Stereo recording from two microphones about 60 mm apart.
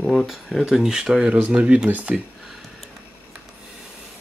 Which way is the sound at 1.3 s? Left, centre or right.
Right.